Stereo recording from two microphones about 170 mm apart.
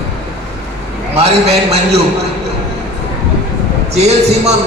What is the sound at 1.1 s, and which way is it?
Speech, 35° right (ahead or behind).